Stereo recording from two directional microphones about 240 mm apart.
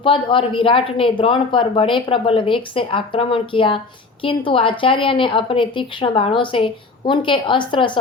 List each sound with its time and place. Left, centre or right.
0.0 s speech: left